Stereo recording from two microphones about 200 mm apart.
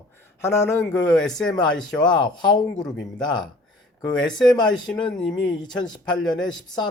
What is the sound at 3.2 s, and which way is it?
Speech, 20° left (ahead or behind).